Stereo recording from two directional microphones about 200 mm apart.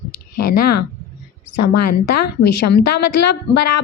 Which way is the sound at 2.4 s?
55° left (ahead or behind).